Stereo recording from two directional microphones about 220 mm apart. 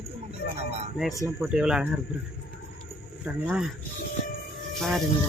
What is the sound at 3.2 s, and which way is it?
Speech, 5° right (ahead or behind).